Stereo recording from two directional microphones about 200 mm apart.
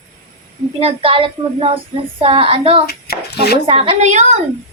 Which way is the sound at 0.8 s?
25° right (ahead or behind).